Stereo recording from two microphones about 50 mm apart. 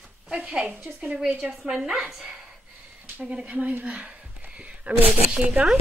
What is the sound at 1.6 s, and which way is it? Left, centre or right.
Speech, centre.